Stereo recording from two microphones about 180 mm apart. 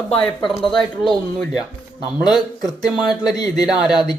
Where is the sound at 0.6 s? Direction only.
5° left (ahead or behind).